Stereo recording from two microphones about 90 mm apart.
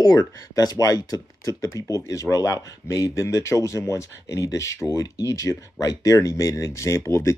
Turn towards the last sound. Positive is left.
turn(degrees=30)  # may be behind; listen again after turning